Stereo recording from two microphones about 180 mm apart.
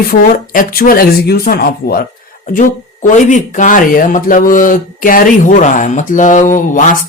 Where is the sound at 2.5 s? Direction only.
45° left (ahead or behind).